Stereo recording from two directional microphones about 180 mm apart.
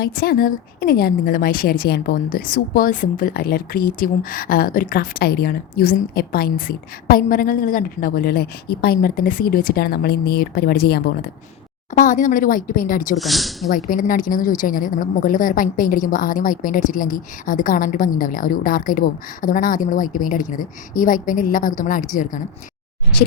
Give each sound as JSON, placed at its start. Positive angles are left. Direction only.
{"t": 0.0, "sound": "a woman's voice", "side_deg": 55}
{"t": 11.9, "sound": "a woman's voice", "side_deg": 45}
{"t": 13.1, "sound": "speech", "side_deg": 0}
{"t": 13.7, "sound": "a woman's voice", "side_deg": 50}